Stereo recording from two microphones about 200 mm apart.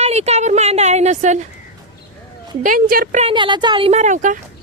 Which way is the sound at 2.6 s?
45° right (ahead or behind).